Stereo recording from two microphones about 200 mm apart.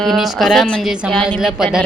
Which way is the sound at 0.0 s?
Centre (ahead or behind).